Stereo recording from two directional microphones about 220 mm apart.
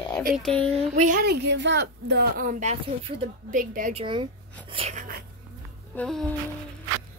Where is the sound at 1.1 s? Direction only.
45° right (ahead or behind).